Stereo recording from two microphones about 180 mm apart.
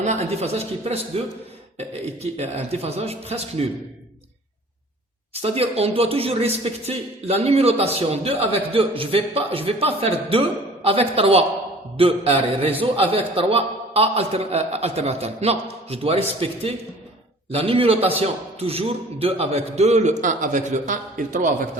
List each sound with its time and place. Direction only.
0.0 s speech: 40° right (ahead or behind)
5.3 s a man's voice: 35° right (ahead or behind)